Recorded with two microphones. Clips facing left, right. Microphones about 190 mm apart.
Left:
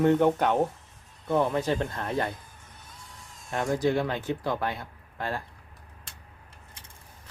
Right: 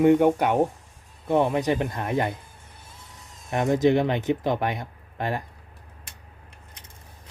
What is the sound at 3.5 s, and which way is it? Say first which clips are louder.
Speech: right 5 dB; 20° right (ahead or behind).